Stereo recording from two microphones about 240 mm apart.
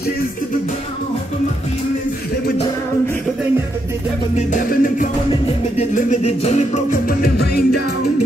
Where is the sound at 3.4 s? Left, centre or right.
Centre.